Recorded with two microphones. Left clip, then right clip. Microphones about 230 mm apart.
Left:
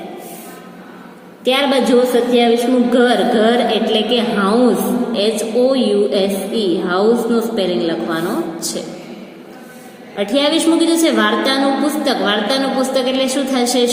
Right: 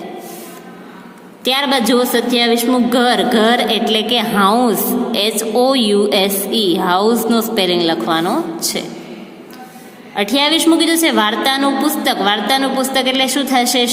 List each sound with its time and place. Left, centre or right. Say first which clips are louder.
1.5 s a woman's voice: left 1 dB; right
10.2 s a woman's voice: right 1 dB; right